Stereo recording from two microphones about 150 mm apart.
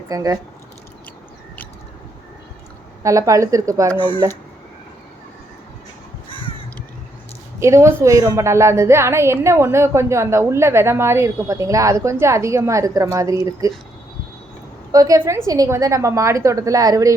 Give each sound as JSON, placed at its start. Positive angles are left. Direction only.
{"t": 0.1, "sound": "a woman's voice", "side_deg": -25}
{"t": 3.0, "sound": "a woman's voice", "side_deg": -20}
{"t": 7.6, "sound": "a woman's voice", "side_deg": -20}
{"t": 14.9, "sound": "a woman's voice", "side_deg": -25}